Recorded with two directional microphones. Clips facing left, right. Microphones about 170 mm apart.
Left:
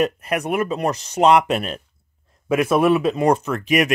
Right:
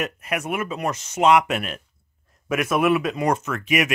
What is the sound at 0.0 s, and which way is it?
Speech, 35° left (ahead or behind).